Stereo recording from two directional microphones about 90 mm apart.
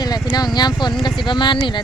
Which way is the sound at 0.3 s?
50° left (ahead or behind).